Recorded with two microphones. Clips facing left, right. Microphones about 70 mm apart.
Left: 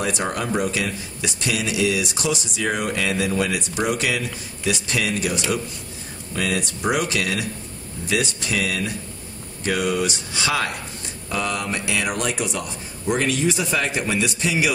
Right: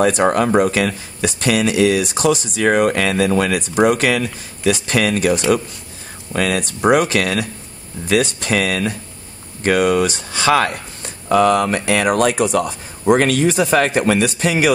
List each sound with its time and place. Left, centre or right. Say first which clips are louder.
0.0 s speech: right 10 dB; right
3.7 s speech: right 11 dB; right
6.8 s speech: right 9 dB; right
11.2 s speech: right 12 dB; right